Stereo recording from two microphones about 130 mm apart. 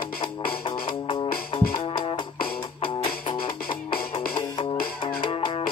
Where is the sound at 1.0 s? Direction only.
35° left (ahead or behind).